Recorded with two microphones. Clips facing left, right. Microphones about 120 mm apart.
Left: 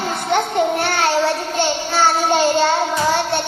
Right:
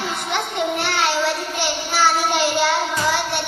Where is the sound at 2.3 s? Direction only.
35° left (ahead or behind).